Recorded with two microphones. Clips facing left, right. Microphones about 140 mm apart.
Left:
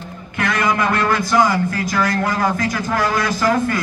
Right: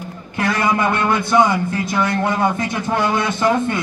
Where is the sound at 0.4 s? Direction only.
30° right (ahead or behind).